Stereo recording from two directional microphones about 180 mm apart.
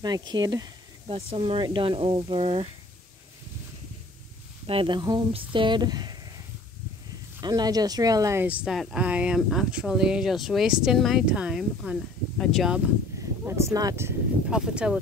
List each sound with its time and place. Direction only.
0.0 s speech: 25° right (ahead or behind)
1.1 s speech: 30° right (ahead or behind)
4.6 s speech: 30° right (ahead or behind); by 12.8 s centre (ahead or behind)
13.5 s speech: 15° right (ahead or behind)
14.5 s speech: 5° right (ahead or behind)